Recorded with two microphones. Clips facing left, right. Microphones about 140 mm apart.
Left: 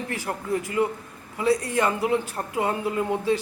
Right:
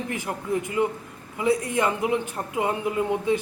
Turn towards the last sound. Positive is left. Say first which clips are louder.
# even
turn(degrees=-20)  # may be behind; listen again after turning